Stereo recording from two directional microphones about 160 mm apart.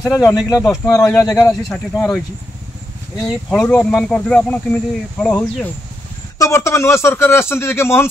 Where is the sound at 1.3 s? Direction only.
20° left (ahead or behind).